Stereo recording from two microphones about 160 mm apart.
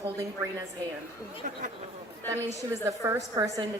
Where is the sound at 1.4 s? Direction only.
50° right (ahead or behind).